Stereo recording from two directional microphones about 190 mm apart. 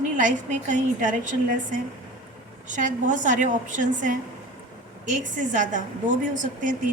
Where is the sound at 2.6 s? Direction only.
40° right (ahead or behind).